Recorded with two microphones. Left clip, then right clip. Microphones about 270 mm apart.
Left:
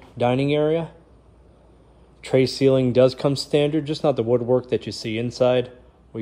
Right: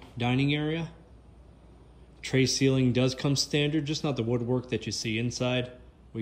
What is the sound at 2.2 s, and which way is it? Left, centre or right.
Speech, centre.